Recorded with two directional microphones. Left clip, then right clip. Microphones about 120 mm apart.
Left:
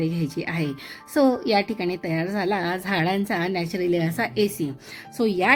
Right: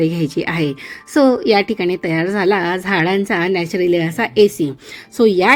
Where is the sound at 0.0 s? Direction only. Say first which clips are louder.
Right 9 dB; 45° right (ahead or behind).